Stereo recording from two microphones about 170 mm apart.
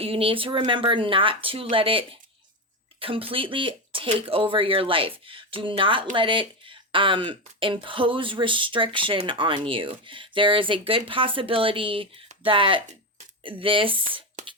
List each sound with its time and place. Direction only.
0.0 s speech: 35° right (ahead or behind)